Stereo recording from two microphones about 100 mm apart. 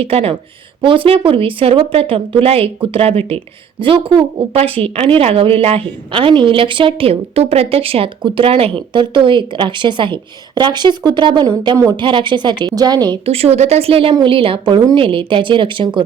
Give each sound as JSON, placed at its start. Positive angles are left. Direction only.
{"t": 0.0, "sound": "speech", "side_deg": -75}
{"t": 0.8, "sound": "a woman's voice", "side_deg": -60}
{"t": 13.2, "sound": "a woman's voice", "side_deg": -85}